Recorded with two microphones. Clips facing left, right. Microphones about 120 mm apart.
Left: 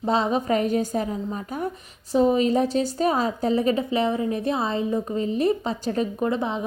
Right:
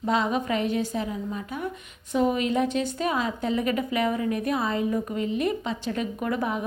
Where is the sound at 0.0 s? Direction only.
30° left (ahead or behind).